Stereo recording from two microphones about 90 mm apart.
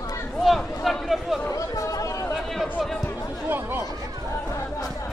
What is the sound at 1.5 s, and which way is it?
Chatter, 40° left (ahead or behind).